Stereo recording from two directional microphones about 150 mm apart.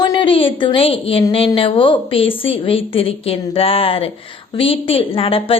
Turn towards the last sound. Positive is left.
turn(degrees=40)  # may be behind; listen again after turning